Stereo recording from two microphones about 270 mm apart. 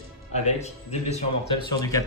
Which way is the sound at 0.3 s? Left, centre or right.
Left.